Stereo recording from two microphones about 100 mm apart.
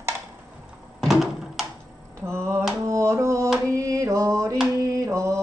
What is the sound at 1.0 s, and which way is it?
Door, 5° right (ahead or behind).